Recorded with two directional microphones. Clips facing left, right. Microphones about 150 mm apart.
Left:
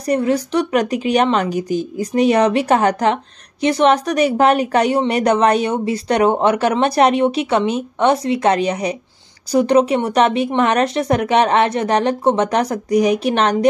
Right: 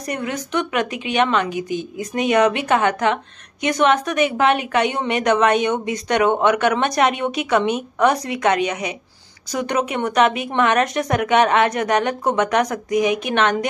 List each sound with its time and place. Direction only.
0.0 s a woman's voice: 35° left (ahead or behind)